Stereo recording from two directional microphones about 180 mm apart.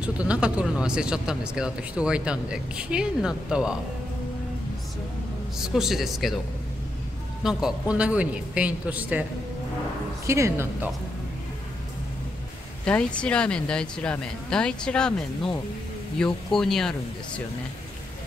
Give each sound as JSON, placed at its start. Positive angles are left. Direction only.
{"t": 0.0, "sound": "speech", "side_deg": -5}
{"t": 5.6, "sound": "speech", "side_deg": 0}
{"t": 7.4, "sound": "a man's voice", "side_deg": -5}
{"t": 10.2, "sound": "a man's voice", "side_deg": -15}
{"t": 12.8, "sound": "speech", "side_deg": 5}